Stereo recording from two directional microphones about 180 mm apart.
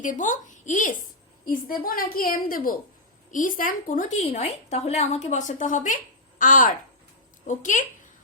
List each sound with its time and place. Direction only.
0.0 s a woman's voice: 45° left (ahead or behind)